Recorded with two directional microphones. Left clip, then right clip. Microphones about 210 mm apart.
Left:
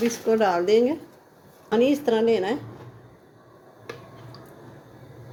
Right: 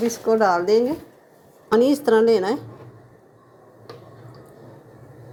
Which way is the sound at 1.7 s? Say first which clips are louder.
Right 4 dB; 30° right (ahead or behind).